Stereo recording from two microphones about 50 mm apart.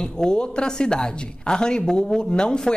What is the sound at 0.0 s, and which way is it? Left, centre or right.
Speech, centre.